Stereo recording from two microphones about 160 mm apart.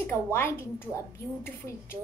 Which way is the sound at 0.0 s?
15° left (ahead or behind).